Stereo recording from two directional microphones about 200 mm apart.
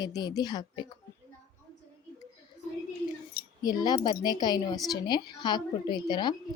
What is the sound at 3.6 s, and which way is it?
A woman's voice, 20° left (ahead or behind).